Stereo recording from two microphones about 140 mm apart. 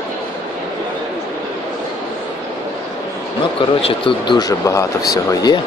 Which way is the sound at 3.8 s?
35° left (ahead or behind).